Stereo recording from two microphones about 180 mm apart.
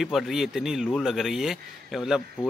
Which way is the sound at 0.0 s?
Centre (ahead or behind).